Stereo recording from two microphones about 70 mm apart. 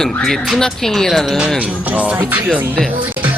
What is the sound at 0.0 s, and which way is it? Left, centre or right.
A man's voice, centre.